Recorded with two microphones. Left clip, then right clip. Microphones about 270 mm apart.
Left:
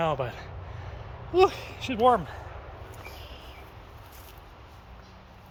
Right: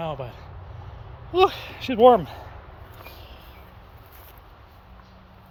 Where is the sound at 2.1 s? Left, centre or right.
Right.